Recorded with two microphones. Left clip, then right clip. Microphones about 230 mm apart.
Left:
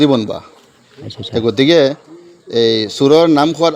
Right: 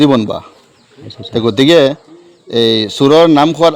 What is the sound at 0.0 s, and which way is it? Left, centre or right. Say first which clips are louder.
Speech: right 2 dB; right.